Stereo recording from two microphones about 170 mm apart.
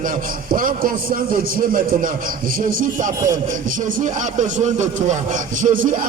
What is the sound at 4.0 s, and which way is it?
Speech, 50° right (ahead or behind).